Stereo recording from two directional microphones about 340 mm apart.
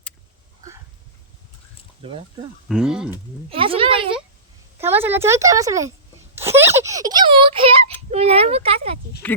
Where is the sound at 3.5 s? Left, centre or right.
Centre.